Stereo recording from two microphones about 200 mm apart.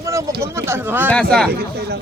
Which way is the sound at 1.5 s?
55° right (ahead or behind).